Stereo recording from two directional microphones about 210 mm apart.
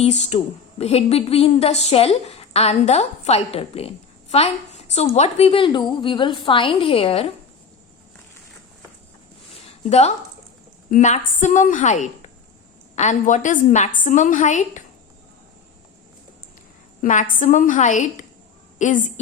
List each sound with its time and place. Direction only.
0.0 s a woman's voice: 30° left (ahead or behind)
10.9 s a woman's voice: 35° left (ahead or behind)
17.0 s a woman's voice: 40° left (ahead or behind)